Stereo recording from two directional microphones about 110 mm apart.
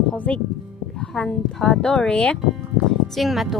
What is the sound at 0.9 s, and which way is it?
Speech, 5° left (ahead or behind).